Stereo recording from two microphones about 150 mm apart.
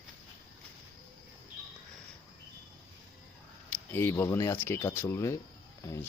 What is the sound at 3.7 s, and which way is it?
Speech, 15° left (ahead or behind).